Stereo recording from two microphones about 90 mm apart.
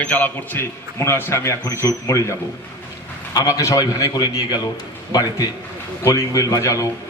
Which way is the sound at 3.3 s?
35° left (ahead or behind).